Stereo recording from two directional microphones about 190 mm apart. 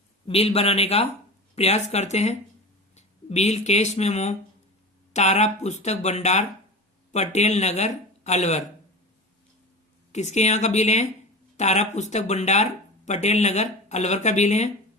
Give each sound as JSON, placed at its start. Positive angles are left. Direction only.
{"t": 0.3, "sound": "speech", "side_deg": 30}
{"t": 10.1, "sound": "speech", "side_deg": 35}